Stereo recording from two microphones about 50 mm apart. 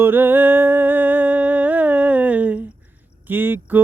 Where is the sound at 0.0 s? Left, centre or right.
Right.